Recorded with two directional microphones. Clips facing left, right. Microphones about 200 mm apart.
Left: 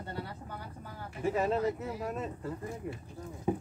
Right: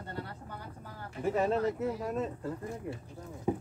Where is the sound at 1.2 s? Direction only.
5° left (ahead or behind).